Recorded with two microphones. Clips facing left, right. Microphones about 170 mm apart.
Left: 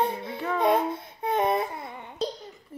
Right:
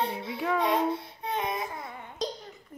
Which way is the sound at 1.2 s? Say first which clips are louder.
Left 8 dB; 55° left (ahead or behind).